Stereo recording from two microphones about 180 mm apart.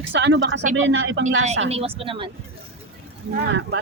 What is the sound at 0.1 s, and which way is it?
Speech, 90° right.